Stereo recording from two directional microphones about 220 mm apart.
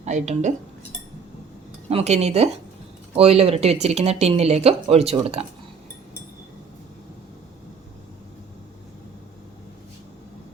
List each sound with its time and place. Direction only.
0.0 s speech: 30° right (ahead or behind)
1.9 s speech: 30° right (ahead or behind)